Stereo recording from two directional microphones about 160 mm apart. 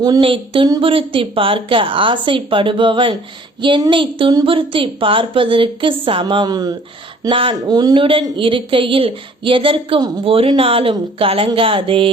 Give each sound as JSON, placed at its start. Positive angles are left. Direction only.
{"t": 0.0, "sound": "speech", "side_deg": -30}